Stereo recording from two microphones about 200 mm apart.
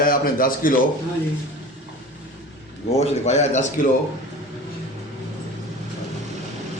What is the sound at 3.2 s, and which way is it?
Speech, 35° left (ahead or behind).